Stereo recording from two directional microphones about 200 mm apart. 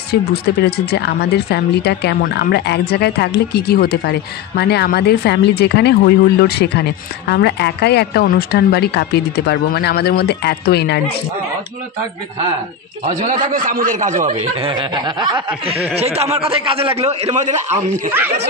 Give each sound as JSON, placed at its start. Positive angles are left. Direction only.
{"t": 0.1, "sound": "speech", "side_deg": 50}
{"t": 13.0, "sound": "speech", "side_deg": -35}